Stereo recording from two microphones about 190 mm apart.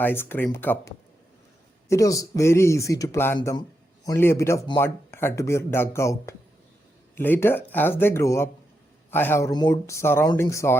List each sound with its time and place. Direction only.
0.0 s a man's voice: 10° left (ahead or behind)